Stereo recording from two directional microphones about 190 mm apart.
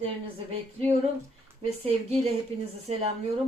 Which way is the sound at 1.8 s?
35° right (ahead or behind).